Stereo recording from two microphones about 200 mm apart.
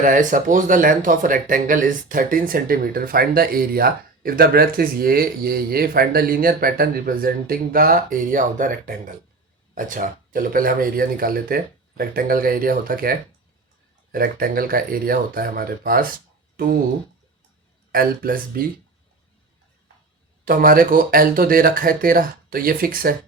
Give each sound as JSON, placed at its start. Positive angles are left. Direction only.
{"t": 0.0, "sound": "speech", "side_deg": -40}
{"t": 16.6, "sound": "a sound", "side_deg": -45}
{"t": 17.9, "sound": "speech", "side_deg": -45}
{"t": 20.4, "sound": "speech", "side_deg": -45}